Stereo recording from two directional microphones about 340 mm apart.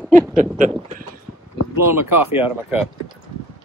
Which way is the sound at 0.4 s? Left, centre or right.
Right.